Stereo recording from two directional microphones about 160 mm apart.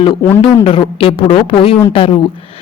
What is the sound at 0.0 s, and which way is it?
A man's voice, 30° left (ahead or behind).